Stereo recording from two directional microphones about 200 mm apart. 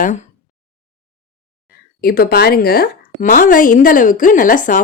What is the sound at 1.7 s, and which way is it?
A woman's voice, 50° left (ahead or behind).